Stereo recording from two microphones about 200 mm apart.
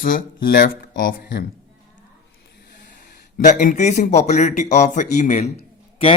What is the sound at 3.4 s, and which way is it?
A man's voice, 40° left (ahead or behind).